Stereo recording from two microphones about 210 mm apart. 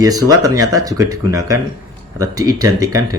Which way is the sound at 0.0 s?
15° right (ahead or behind).